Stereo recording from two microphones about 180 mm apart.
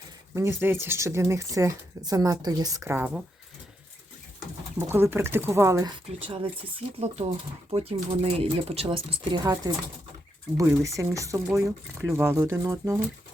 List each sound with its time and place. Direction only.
0.3 s speech: 15° right (ahead or behind)
4.8 s speech: 15° right (ahead or behind)
6.1 s speech: 30° right (ahead or behind)
11.4 s speech: 5° right (ahead or behind)